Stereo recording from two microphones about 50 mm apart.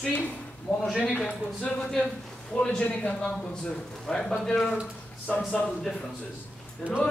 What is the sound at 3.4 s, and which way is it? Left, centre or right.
A man's voice, centre.